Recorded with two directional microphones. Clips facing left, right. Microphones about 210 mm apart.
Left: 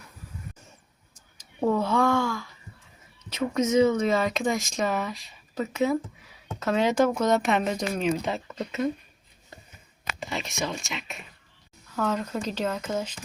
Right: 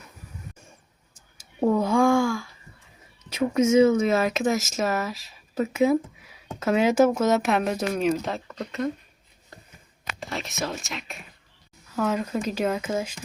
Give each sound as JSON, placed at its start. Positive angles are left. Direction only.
{"t": 1.4, "sound": "a sound", "side_deg": -10}
{"t": 3.2, "sound": "speech", "side_deg": -10}
{"t": 10.2, "sound": "speech", "side_deg": 0}